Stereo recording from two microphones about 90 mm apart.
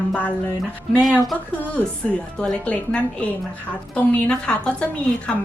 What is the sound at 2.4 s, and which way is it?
A woman's voice, 15° left (ahead or behind).